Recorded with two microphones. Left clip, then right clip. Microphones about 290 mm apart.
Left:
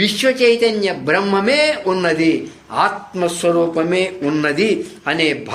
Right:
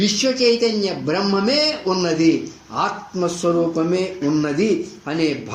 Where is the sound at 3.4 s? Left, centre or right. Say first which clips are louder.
Left 4 dB; left.